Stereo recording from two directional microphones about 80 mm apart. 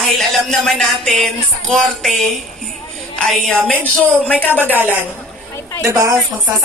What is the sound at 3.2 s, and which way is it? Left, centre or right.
A woman's voice, centre.